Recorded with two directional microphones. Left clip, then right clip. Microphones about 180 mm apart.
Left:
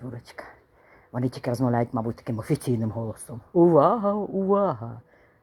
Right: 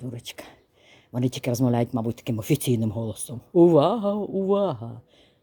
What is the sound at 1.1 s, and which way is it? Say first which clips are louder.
Speech: right 1 dB; 30° right (ahead or behind).